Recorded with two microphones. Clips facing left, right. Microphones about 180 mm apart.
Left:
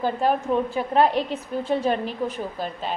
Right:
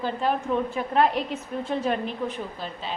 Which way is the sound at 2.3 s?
45° left (ahead or behind).